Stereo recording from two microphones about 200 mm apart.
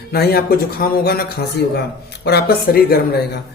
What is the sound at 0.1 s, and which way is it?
Speech, 50° left (ahead or behind).